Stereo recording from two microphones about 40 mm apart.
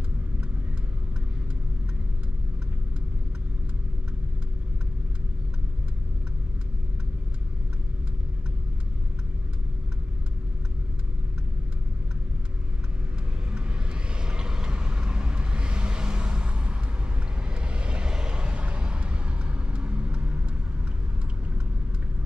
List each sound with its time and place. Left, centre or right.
13.5 s vehicle: right